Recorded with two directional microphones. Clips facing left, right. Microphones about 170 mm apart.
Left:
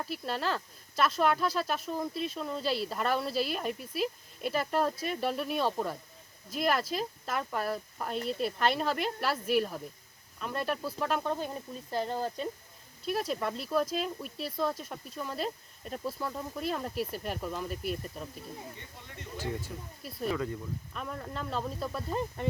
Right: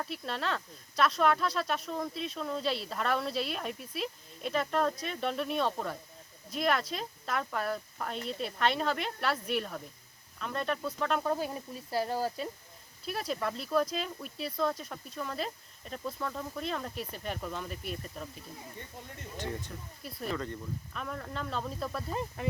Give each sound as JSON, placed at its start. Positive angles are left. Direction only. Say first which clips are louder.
{"t": 0.0, "sound": "speech", "louder": "left 2 dB", "side_deg": 0}
{"t": 11.2, "sound": "speech", "louder": "right 1 dB", "side_deg": -5}
{"t": 19.4, "sound": "speech", "louder": "left 2 dB", "side_deg": 5}